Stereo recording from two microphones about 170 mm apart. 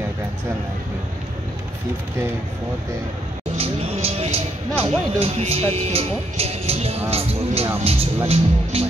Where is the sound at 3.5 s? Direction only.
35° right (ahead or behind).